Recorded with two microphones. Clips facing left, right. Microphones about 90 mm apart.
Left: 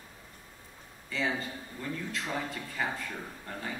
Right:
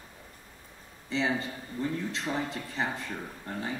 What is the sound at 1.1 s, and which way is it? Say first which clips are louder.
A man's voice: right 3 dB; 20° right (ahead or behind).